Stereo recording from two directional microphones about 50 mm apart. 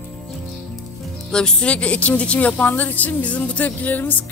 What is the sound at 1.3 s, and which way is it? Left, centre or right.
A woman's voice, centre.